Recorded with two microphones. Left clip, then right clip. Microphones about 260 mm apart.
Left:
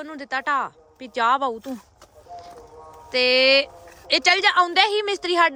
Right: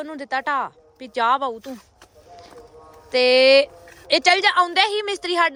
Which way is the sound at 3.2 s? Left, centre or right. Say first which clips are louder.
Right 3 dB; centre.